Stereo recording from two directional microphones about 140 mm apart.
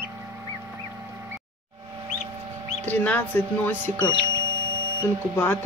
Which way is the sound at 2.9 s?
10° left (ahead or behind).